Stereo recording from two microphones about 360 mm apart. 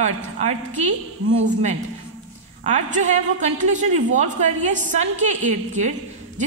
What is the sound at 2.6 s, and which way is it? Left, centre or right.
A woman's voice, centre.